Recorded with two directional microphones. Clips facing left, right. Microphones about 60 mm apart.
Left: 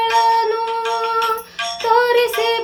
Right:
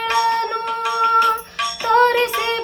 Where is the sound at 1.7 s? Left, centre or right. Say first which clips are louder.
Left 1 dB; right.